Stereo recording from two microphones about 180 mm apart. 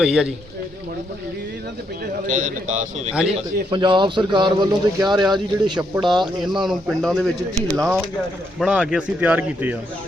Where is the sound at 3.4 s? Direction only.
25° right (ahead or behind).